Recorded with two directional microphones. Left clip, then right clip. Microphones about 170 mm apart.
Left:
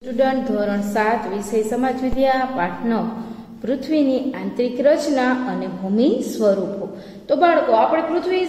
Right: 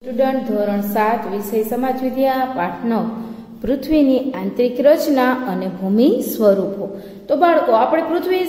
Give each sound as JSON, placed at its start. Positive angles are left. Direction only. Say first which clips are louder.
{"t": 0.2, "sound": "a woman's voice", "louder": "right 1 dB", "side_deg": -10}
{"t": 3.6, "sound": "a woman's voice", "louder": "right 3 dB", "side_deg": -30}
{"t": 7.9, "sound": "a woman's voice", "louder": "right 2 dB", "side_deg": -45}